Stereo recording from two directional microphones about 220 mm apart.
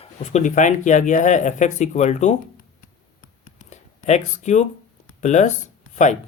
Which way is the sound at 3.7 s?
30° left (ahead or behind).